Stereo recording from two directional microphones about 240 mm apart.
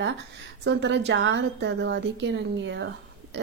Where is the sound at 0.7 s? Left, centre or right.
Right.